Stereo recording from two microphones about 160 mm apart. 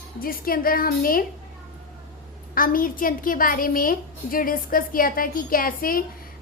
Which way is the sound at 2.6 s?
60° left (ahead or behind).